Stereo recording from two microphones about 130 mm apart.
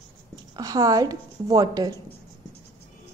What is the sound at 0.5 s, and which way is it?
A woman's voice, 30° right (ahead or behind).